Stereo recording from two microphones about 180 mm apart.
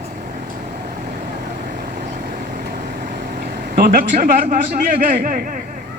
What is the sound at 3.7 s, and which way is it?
A man's voice, 55° right (ahead or behind).